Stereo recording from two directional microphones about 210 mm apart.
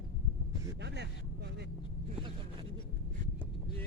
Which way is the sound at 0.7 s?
55° right (ahead or behind).